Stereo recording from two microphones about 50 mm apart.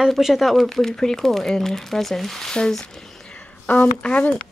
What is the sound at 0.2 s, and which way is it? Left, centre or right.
Speech, centre.